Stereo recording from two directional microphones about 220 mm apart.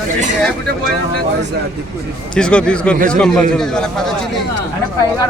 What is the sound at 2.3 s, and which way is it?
A man's voice, 5° left (ahead or behind).